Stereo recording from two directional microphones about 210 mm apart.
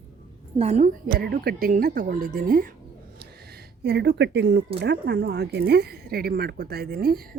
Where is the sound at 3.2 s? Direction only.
50° right (ahead or behind).